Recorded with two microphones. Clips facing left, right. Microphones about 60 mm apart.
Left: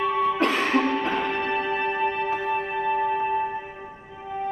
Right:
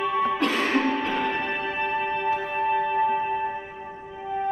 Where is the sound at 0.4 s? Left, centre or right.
Left.